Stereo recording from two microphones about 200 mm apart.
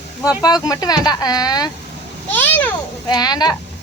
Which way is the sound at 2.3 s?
10° left (ahead or behind).